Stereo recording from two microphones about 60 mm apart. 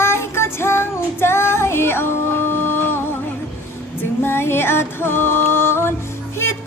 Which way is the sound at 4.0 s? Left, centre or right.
Left.